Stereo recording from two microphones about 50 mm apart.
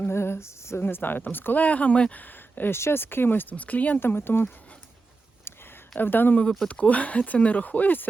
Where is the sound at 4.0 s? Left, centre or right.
Left.